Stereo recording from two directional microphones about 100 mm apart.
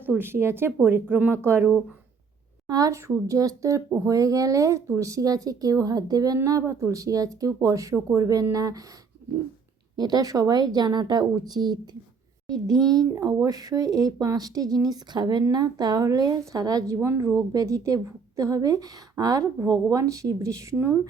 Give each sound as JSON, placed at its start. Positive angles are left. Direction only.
{"t": 0.0, "sound": "a woman's voice", "side_deg": -20}
{"t": 2.6, "sound": "speech", "side_deg": -35}
{"t": 10.0, "sound": "a woman's voice", "side_deg": -40}